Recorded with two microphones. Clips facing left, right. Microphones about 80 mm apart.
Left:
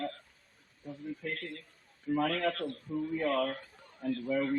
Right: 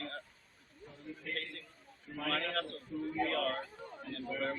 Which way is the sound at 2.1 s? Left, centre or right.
Left.